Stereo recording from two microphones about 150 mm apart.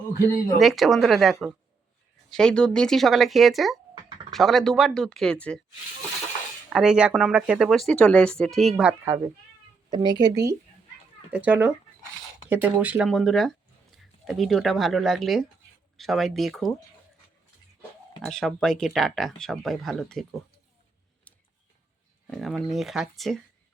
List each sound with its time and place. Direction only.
0.6 s speech: centre (ahead or behind)
6.7 s speech: 5° right (ahead or behind)
9.0 s speech: 20° right (ahead or behind)
9.9 s speech: 30° right (ahead or behind)
11.3 s speech: 10° right (ahead or behind)
13.1 s speech: centre (ahead or behind)
18.2 s speech: 5° left (ahead or behind)
22.3 s speech: centre (ahead or behind)